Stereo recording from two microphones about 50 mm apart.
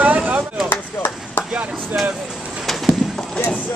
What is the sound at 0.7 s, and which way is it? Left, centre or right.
Chop, left.